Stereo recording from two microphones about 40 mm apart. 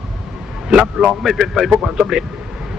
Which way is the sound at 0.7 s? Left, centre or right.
Centre.